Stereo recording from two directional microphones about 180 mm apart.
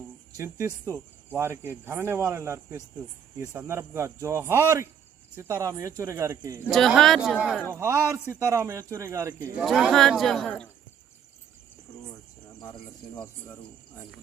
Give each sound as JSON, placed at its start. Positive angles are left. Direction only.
{"t": 0.3, "sound": "speech", "side_deg": -15}
{"t": 6.7, "sound": "speech", "side_deg": 0}
{"t": 7.7, "sound": "speech", "side_deg": -15}
{"t": 9.6, "sound": "speech", "side_deg": 0}
{"t": 13.1, "sound": "speech", "side_deg": 15}